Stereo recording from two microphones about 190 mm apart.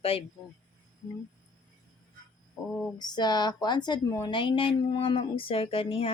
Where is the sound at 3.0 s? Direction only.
20° left (ahead or behind).